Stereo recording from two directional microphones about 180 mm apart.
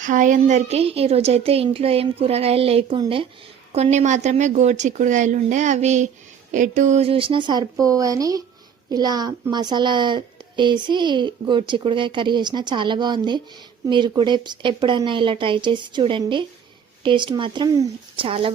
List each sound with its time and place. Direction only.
0.0 s a woman's voice: 45° right (ahead or behind)